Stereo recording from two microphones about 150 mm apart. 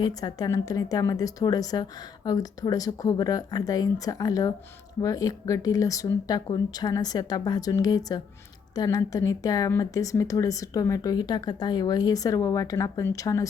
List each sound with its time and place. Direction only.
0.2 s speech: 25° left (ahead or behind)